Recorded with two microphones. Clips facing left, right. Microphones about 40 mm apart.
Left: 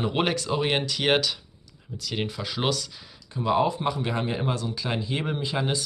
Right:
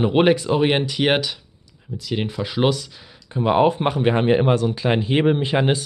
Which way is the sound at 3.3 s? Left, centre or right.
Right.